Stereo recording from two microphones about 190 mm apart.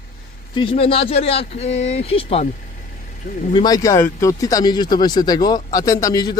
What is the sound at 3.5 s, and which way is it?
Speech, 20° left (ahead or behind).